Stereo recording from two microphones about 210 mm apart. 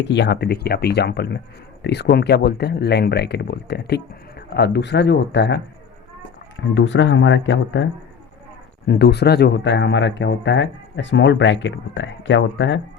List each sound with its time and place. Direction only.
0.0 s speech: 55° left (ahead or behind)
6.7 s speech: 60° left (ahead or behind)
8.9 s speech: 50° left (ahead or behind)